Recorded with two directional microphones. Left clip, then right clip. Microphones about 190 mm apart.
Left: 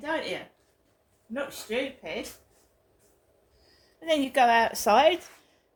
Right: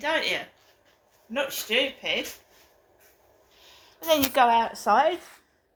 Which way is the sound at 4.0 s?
50° left (ahead or behind).